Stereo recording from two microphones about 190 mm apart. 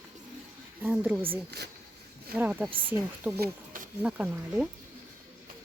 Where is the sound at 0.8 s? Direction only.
10° right (ahead or behind).